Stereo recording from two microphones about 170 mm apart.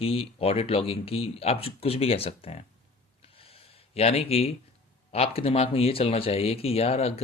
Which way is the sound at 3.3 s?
35° left (ahead or behind).